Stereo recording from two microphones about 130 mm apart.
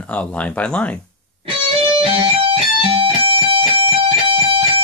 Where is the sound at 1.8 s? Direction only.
40° right (ahead or behind).